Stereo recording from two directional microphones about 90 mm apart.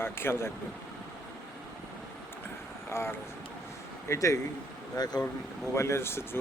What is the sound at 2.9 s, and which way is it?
Speech, 30° left (ahead or behind).